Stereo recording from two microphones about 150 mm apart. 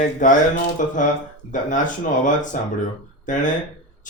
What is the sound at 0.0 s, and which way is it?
Speech, 55° left (ahead or behind).